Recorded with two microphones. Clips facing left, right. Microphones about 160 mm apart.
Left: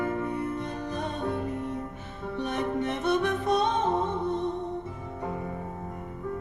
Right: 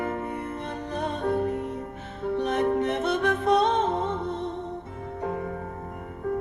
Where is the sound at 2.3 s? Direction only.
60° right (ahead or behind).